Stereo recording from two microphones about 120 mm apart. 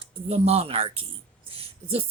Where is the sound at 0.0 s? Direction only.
50° right (ahead or behind).